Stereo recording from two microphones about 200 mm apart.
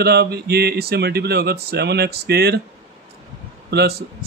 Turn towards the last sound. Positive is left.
turn(degrees=-55)  # may be behind; listen again after turning